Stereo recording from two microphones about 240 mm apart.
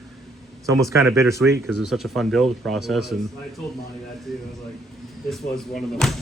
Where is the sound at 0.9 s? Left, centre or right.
Centre.